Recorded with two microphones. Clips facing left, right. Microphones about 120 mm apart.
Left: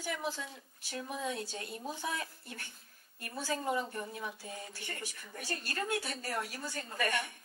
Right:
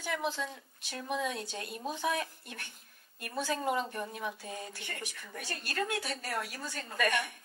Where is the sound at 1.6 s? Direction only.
20° right (ahead or behind).